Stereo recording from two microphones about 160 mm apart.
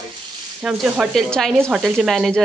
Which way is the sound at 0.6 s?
Centre (ahead or behind).